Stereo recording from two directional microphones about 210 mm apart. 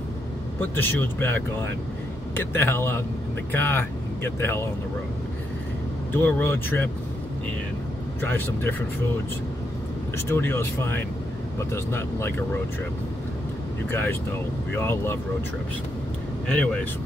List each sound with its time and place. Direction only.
0.6 s speech: 10° left (ahead or behind)
6.1 s speech: 10° left (ahead or behind)
8.2 s speech: 10° left (ahead or behind)
10.1 s speech: 10° left (ahead or behind)
13.8 s speech: 10° left (ahead or behind)
16.4 s speech: 5° left (ahead or behind)